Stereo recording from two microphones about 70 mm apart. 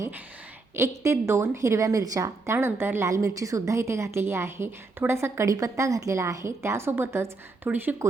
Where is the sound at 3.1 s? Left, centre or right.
Right.